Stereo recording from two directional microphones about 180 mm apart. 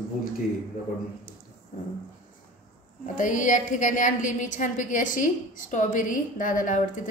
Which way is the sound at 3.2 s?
45° left (ahead or behind).